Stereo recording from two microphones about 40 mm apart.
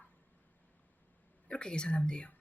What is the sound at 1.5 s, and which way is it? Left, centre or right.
Speech, left.